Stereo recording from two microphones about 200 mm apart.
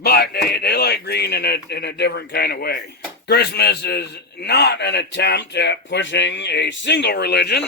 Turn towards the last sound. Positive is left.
turn(degrees=55)  # may be behind; listen again after turning